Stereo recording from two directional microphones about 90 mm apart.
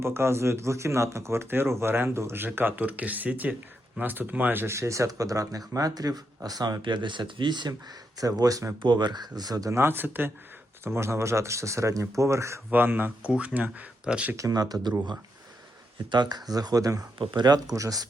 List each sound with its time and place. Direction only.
0.0 s speech: 30° right (ahead or behind); by 7.7 s 60° right (ahead or behind)
7.7 s speech: 40° right (ahead or behind)
8.8 s speech: 60° right (ahead or behind); by 12.6 s 35° right (ahead or behind)
12.7 s speech: 20° right (ahead or behind)
14.3 s speech: 40° right (ahead or behind)
16.0 s speech: 55° right (ahead or behind)
17.2 s speech: 55° right (ahead or behind)